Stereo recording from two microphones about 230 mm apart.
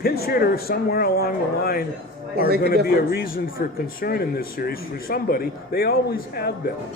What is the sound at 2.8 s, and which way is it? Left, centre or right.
A man's voice, left.